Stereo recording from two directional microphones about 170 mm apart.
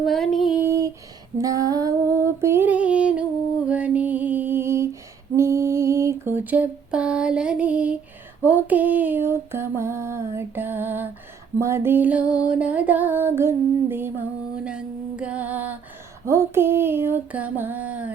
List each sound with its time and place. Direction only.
0.0 s female singing: centre (ahead or behind)
0.6 s a sound: 15° right (ahead or behind)
1.4 s female singing: 20° right (ahead or behind)
3.7 s music: 10° right (ahead or behind)
5.4 s a sound: 15° right (ahead or behind)
8.4 s music: 10° right (ahead or behind)